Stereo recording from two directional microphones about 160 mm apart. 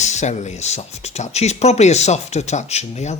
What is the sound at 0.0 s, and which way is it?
Speech, 45° left (ahead or behind).